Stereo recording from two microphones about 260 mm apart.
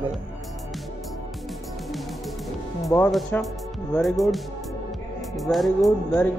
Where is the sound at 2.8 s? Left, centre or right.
Centre.